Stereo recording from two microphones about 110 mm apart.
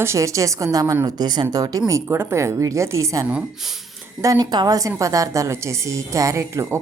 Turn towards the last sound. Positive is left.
turn(degrees=-25)  # may be behind; listen again after turning